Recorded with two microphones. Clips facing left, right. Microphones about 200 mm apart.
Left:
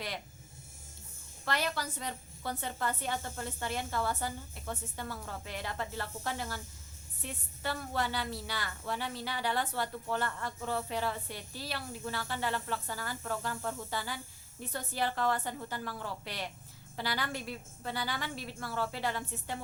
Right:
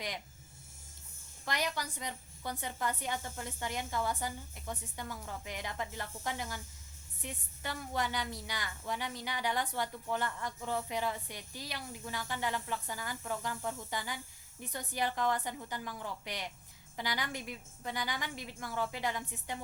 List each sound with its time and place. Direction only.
1.5 s a woman's voice: 15° right (ahead or behind)